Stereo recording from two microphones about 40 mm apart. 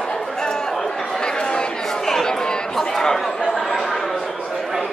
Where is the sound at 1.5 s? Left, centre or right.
Centre.